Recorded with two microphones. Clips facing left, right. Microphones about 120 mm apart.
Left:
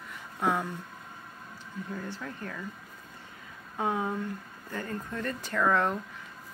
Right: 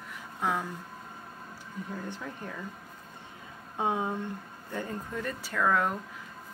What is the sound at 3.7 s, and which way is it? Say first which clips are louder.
Speech: even; 20° right (ahead or behind).